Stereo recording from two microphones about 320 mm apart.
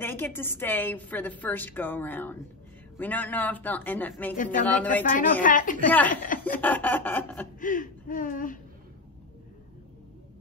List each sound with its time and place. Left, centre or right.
0.0 s a woman's voice: centre
4.4 s speech: left
6.4 s a woman's voice: centre
7.6 s speech: left